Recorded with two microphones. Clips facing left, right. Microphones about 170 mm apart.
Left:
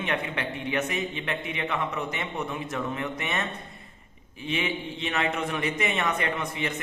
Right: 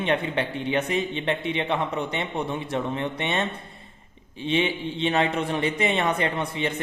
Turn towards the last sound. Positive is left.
turn(degrees=-30)  # may be behind; listen again after turning